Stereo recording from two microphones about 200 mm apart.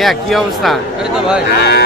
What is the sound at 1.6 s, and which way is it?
Speech, 55° left (ahead or behind).